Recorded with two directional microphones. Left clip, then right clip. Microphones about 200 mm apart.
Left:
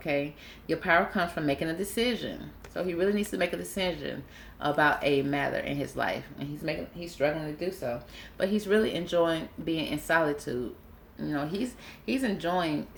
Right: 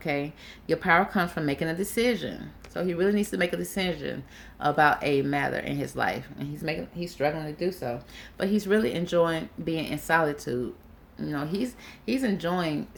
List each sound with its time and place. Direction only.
0.0 s speech: 45° right (ahead or behind)